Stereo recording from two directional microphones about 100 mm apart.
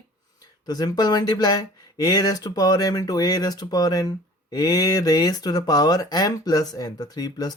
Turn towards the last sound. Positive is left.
turn(degrees=40)  # may be behind; listen again after turning